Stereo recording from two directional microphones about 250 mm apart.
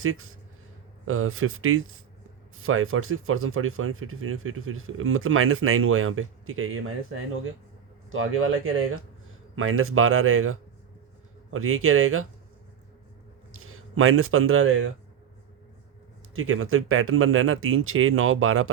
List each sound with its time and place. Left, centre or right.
0.0 s speech: right
8.1 s speech: right
13.5 s speech: right
16.3 s speech: right